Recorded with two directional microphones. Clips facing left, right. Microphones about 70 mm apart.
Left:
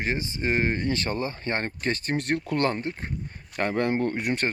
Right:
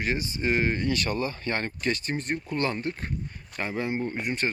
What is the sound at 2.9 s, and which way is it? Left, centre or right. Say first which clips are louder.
Speech: right 1 dB; left.